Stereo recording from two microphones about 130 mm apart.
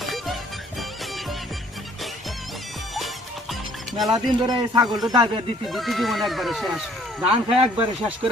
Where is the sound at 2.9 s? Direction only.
Centre (ahead or behind).